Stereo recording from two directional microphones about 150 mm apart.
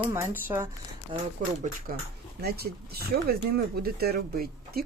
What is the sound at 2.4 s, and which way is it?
Speech, 90° right.